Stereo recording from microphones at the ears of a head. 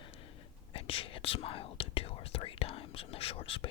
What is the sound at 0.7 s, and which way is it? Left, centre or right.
Whispering, left.